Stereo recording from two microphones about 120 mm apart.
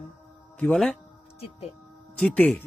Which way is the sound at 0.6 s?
5° left (ahead or behind).